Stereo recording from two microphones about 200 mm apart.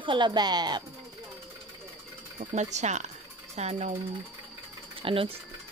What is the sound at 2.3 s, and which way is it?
Speech, 35° right (ahead or behind).